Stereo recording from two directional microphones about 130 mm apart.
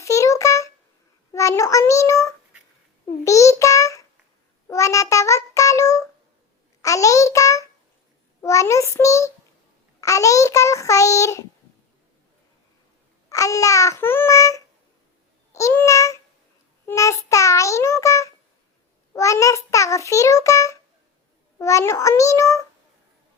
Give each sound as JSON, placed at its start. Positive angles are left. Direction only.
{"t": 0.0, "sound": "a sound", "side_deg": 25}
{"t": 1.3, "sound": "a child's voice", "side_deg": 25}
{"t": 13.3, "sound": "a child's voice", "side_deg": 25}
{"t": 16.8, "sound": "child singing", "side_deg": 25}
{"t": 17.2, "sound": "a child's voice", "side_deg": 25}